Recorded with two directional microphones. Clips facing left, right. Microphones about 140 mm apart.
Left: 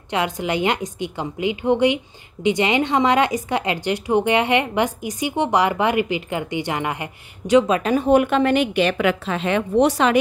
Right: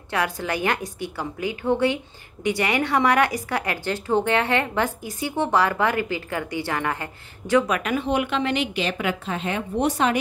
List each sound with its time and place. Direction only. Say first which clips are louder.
0.1 s a woman's voice: left 3 dB; 20° left (ahead or behind); by 10.1 s 90° left